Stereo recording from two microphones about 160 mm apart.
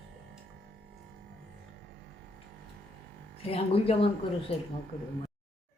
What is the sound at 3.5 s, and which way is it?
Speech, 40° left (ahead or behind).